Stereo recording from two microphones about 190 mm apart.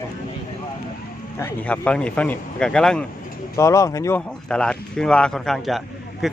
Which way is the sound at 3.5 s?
15° left (ahead or behind).